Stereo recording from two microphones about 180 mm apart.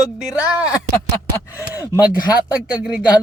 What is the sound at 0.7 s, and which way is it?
Speech, 20° left (ahead or behind).